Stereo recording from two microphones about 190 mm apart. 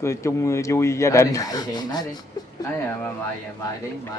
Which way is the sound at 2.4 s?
20° left (ahead or behind).